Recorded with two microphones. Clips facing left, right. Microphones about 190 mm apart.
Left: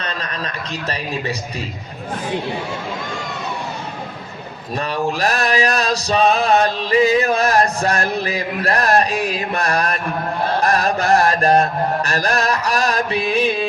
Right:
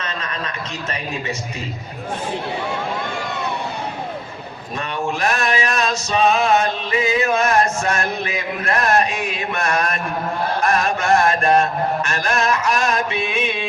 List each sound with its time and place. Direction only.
5.2 s mantra: 35° left (ahead or behind)